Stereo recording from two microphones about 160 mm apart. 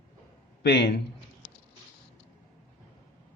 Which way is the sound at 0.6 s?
90° left.